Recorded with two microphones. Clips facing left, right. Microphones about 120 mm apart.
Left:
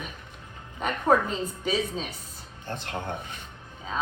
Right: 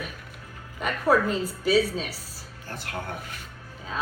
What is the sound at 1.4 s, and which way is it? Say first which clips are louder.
Speech: right 6 dB; 5° right (ahead or behind).